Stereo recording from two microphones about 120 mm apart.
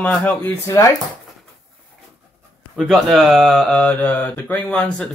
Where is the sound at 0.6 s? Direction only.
25° left (ahead or behind).